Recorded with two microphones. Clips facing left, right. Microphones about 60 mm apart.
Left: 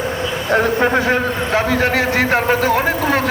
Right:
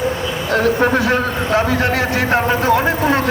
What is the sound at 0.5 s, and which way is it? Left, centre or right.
Speech, left.